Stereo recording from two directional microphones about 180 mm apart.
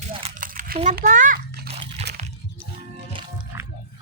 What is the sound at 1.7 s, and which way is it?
Crunch, 35° right (ahead or behind).